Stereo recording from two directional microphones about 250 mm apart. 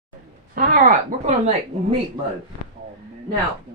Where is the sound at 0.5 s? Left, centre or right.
Right.